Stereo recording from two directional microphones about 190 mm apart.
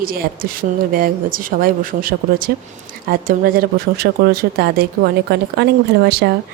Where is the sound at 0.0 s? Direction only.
50° right (ahead or behind).